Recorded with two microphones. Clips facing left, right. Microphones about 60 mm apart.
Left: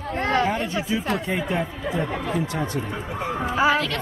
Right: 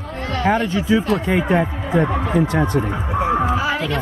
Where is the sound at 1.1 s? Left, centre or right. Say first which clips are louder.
Right 7 dB; right.